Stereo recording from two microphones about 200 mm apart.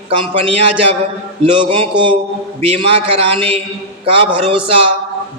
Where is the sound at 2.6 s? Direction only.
30° right (ahead or behind).